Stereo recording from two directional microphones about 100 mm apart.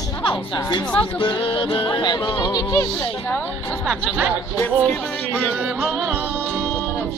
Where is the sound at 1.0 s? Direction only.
60° left (ahead or behind).